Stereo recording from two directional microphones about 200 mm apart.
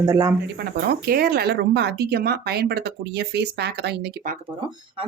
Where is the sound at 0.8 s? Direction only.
50° right (ahead or behind).